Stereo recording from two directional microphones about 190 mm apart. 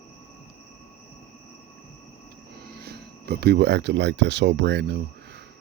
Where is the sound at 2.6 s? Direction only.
55° right (ahead or behind).